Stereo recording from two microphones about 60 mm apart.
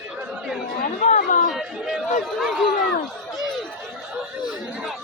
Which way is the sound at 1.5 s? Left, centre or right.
Centre.